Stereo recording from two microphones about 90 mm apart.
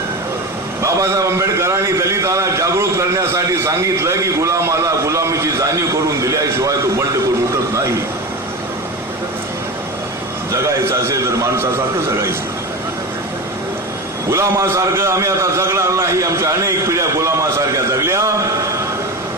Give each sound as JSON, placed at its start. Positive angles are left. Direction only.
{"t": 0.8, "sound": "a man's voice", "side_deg": -35}
{"t": 10.5, "sound": "a man's voice", "side_deg": -35}
{"t": 14.3, "sound": "a man's voice", "side_deg": -35}